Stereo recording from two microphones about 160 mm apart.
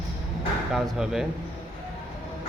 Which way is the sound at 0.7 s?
Centre (ahead or behind).